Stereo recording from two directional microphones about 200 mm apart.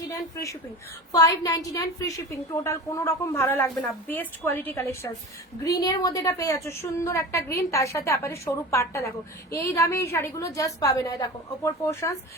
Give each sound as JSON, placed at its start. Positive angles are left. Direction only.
{"t": 0.1, "sound": "a woman's voice", "side_deg": 15}